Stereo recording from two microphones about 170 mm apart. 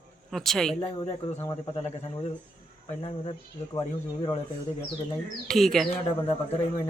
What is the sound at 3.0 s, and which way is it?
Speech, 35° left (ahead or behind).